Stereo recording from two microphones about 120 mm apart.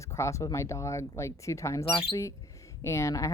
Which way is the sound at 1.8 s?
45° left (ahead or behind).